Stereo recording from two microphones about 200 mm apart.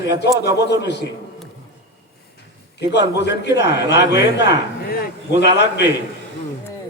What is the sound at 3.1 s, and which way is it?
A man's voice, 60° left (ahead or behind).